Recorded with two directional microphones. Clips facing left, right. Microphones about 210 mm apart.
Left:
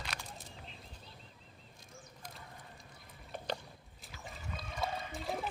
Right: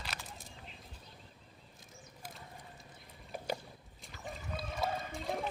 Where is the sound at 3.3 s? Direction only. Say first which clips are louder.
Right 1 dB; 10° right (ahead or behind).